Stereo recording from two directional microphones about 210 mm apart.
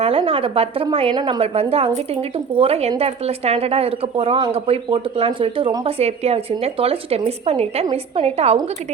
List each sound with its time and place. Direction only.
0.0 s a woman's voice: 25° right (ahead or behind)